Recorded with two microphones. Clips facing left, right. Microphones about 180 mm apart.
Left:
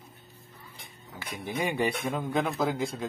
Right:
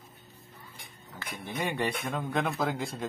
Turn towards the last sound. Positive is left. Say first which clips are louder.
# left 3 dB
turn(degrees=0)  # may be behind; listen again after turning